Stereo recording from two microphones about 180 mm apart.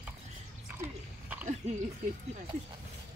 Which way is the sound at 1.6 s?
40° right (ahead or behind).